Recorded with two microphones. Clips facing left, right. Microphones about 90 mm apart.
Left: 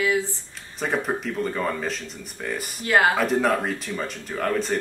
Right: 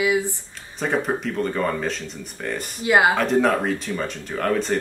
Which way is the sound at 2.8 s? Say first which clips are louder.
Right 2 dB; 15° right (ahead or behind).